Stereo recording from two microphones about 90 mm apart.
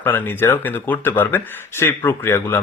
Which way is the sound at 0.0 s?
20° left (ahead or behind).